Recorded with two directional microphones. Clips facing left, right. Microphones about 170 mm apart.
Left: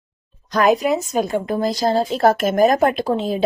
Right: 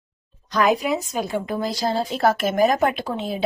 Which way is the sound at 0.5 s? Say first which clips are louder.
Left 4 dB; 45° left (ahead or behind).